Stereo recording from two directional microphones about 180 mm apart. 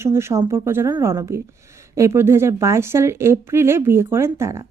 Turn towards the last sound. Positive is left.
turn(degrees=-15)  # may be behind; listen again after turning